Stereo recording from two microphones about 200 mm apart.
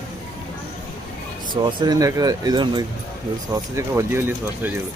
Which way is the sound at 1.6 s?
20° right (ahead or behind).